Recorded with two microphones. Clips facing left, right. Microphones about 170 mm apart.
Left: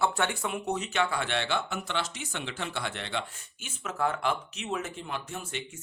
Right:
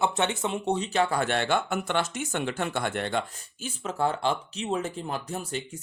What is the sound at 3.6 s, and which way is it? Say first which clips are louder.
Speech: right 3 dB; 30° right (ahead or behind).